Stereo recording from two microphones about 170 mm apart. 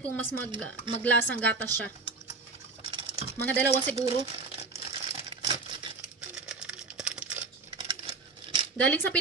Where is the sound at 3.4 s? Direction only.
10° left (ahead or behind).